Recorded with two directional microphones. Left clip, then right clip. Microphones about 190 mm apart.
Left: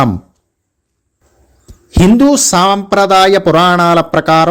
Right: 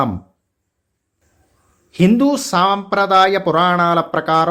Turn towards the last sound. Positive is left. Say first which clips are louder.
# left 6 dB
turn(degrees=45)  # may be behind; listen again after turning